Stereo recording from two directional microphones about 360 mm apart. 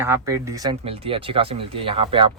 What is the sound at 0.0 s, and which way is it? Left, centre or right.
Speech, centre.